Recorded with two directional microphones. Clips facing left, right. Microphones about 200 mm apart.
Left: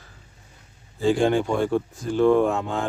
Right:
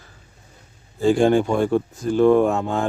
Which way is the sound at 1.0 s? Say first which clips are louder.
Right 4 dB; 45° right (ahead or behind).